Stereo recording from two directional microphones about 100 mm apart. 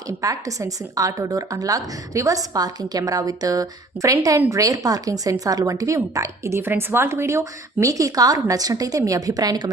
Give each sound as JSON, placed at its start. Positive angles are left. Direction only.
{"t": 0.1, "sound": "speech", "side_deg": -35}